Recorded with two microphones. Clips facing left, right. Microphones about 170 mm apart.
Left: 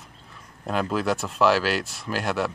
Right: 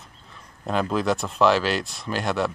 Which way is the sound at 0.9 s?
5° left (ahead or behind).